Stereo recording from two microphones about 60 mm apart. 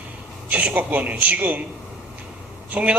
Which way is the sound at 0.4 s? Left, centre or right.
Right.